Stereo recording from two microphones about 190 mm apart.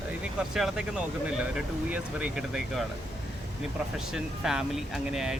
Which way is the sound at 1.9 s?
5° right (ahead or behind).